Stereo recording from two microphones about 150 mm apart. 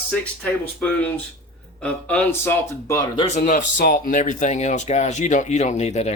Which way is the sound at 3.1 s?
40° left (ahead or behind).